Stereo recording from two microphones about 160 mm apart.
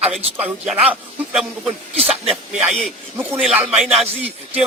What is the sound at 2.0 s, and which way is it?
Speech, 40° right (ahead or behind).